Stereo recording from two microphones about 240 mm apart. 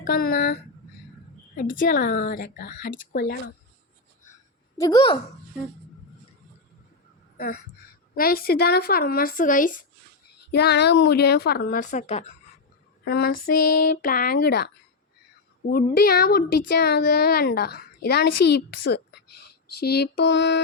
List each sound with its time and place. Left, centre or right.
0.0 s speech: left
4.8 s a woman's voice: centre
7.3 s speech: left
13.1 s speech: left
16.0 s speech: left